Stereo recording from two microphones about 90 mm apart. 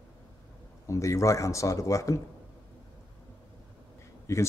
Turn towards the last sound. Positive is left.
turn(degrees=30)  # may be behind; listen again after turning